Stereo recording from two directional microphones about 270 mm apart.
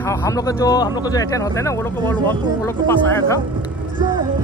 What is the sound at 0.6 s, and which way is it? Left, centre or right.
Speech, centre.